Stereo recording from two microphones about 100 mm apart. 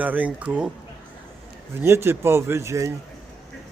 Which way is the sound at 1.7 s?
25° right (ahead or behind).